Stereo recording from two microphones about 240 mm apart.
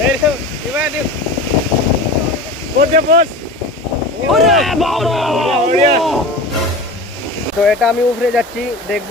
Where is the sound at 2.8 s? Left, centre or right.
Right.